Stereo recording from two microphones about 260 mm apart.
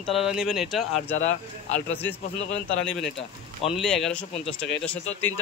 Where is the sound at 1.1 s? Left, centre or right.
Left.